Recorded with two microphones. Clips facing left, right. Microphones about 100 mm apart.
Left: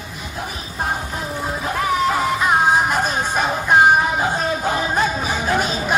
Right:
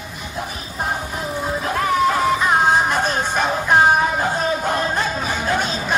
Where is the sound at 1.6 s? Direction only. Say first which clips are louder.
Right 1 dB; 5° left (ahead or behind).